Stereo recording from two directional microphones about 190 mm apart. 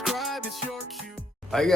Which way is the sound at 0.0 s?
Centre (ahead or behind).